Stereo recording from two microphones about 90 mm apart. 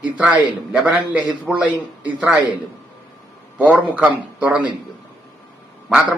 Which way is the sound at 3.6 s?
15° right (ahead or behind).